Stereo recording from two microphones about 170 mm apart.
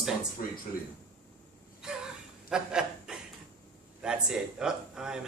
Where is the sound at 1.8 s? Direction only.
5° right (ahead or behind).